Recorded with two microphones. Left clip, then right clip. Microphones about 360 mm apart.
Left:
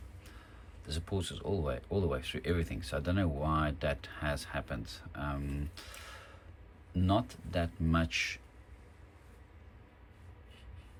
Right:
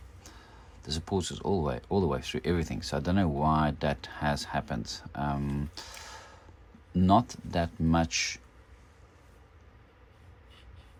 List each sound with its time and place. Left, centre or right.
0.9 s speech: centre